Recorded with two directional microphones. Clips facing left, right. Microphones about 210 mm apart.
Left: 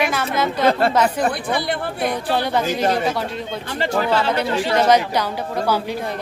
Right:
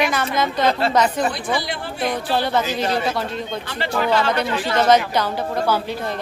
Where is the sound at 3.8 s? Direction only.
35° left (ahead or behind).